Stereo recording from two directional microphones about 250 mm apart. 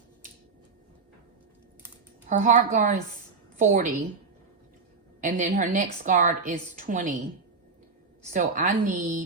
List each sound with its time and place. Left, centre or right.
2.3 s a woman's voice: right
5.2 s a woman's voice: right
8.3 s a woman's voice: right